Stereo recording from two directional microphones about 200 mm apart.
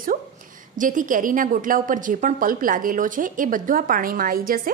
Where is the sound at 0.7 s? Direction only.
40° right (ahead or behind).